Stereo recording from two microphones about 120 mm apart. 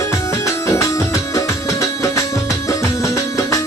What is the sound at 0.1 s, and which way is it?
Music, 25° left (ahead or behind).